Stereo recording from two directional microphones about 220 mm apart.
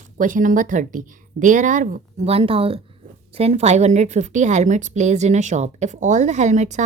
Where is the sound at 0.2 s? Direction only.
35° right (ahead or behind).